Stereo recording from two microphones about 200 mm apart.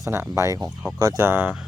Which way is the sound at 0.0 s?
15° right (ahead or behind).